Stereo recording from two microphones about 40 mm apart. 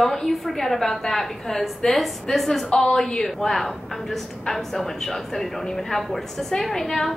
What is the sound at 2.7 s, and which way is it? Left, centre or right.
A woman's voice, centre.